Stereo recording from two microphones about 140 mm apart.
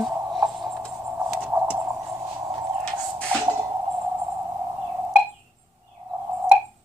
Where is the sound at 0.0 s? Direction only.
Centre (ahead or behind).